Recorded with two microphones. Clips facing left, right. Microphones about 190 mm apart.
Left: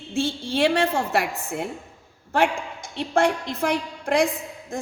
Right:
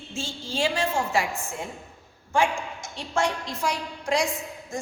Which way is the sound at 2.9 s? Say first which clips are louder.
Left 6 dB; 60° left (ahead or behind).